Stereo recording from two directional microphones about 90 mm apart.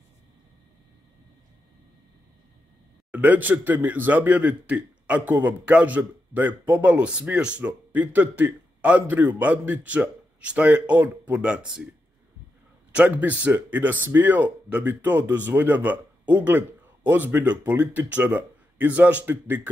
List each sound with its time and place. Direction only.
3.1 s speech: 15° right (ahead or behind)
12.9 s speech: 15° right (ahead or behind)